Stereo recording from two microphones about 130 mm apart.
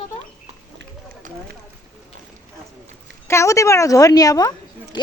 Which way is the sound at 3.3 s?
25° left (ahead or behind).